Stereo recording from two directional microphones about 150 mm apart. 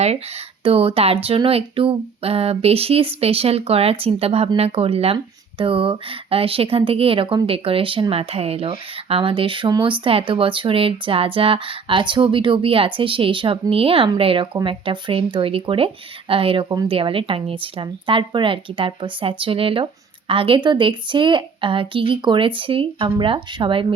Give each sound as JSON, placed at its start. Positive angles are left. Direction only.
{"t": 0.6, "sound": "speech", "side_deg": -40}